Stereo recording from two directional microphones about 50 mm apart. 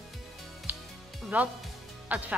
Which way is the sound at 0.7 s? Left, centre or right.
Right.